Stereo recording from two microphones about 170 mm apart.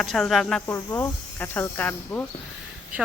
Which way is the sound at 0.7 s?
15° left (ahead or behind).